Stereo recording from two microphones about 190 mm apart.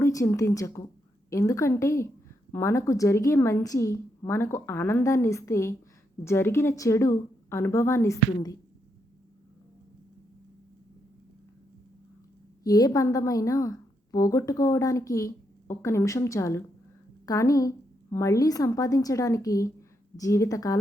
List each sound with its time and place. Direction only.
0.0 s a woman's voice: 15° left (ahead or behind)
12.6 s speech: 20° left (ahead or behind)